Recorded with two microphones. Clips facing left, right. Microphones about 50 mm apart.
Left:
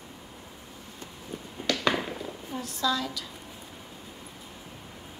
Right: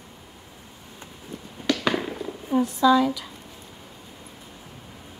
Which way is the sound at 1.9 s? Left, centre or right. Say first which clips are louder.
Right 3 dB; centre.